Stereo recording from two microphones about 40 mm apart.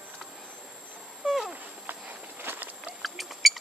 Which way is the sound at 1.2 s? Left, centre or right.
Centre.